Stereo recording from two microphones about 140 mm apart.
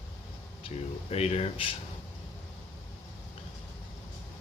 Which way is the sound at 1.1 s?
50° left (ahead or behind).